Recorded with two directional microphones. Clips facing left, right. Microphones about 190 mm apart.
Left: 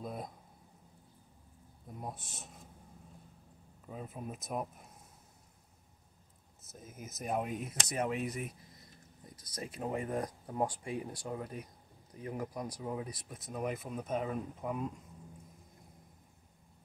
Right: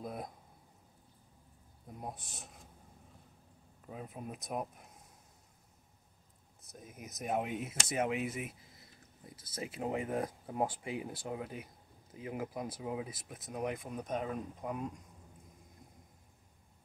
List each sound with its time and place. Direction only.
0.0 s a sound: centre (ahead or behind)
2.0 s speech: centre (ahead or behind)
3.8 s speech: centre (ahead or behind)
6.7 s speech: centre (ahead or behind)
9.3 s speech: 25° right (ahead or behind)
9.8 s speech: 10° right (ahead or behind)